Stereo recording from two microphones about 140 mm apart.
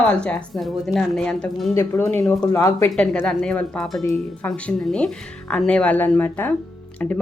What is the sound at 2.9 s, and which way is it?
Speech, 5° left (ahead or behind).